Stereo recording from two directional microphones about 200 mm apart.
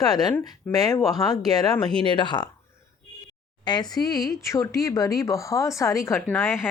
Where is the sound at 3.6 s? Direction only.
20° left (ahead or behind).